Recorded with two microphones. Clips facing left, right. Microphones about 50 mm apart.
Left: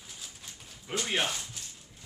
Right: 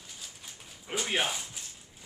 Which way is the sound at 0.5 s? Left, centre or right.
Centre.